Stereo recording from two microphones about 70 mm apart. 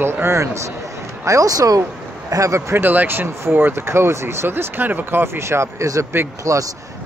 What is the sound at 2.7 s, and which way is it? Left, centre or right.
Speech, right.